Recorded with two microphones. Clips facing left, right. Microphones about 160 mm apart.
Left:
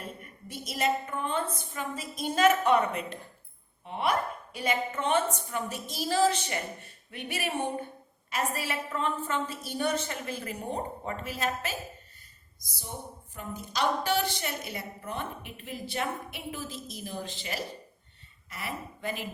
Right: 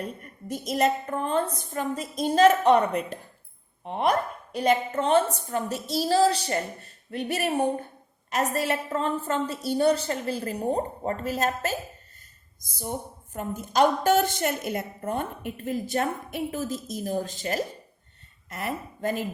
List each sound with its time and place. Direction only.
0.2 s a woman's voice: 40° right (ahead or behind)
2.9 s speech: centre (ahead or behind)
3.8 s a woman's voice: 40° right (ahead or behind)